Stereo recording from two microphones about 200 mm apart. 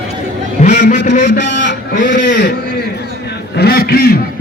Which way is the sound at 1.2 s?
65° left (ahead or behind).